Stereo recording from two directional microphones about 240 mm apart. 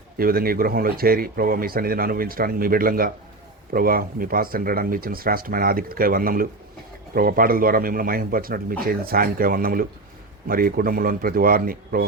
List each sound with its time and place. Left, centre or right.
0.2 s speech: right